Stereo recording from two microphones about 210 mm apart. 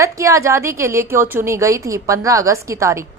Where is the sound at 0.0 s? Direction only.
15° right (ahead or behind).